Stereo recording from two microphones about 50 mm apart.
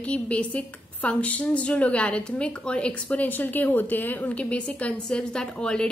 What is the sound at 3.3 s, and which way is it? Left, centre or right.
A woman's voice, left.